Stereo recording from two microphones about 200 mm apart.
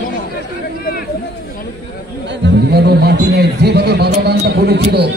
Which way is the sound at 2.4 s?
55° right (ahead or behind).